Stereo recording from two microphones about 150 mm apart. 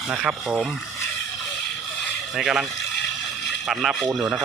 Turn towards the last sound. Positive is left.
turn(degrees=0)  # may be behind; listen again after turning